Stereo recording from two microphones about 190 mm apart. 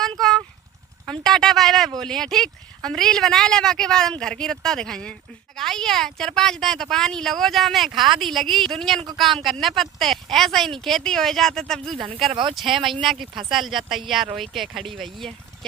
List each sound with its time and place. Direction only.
0.0 s vehicle: centre (ahead or behind)
1.0 s speech: centre (ahead or behind)
12.3 s speech: 25° right (ahead or behind)
12.5 s speech: centre (ahead or behind)